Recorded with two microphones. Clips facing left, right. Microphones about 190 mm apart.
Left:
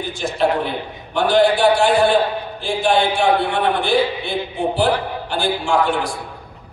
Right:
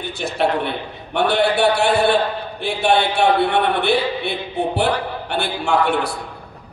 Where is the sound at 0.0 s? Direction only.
65° right (ahead or behind).